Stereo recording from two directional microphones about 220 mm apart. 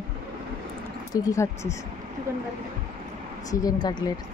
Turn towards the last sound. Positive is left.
turn(degrees=15)  # may be behind; listen again after turning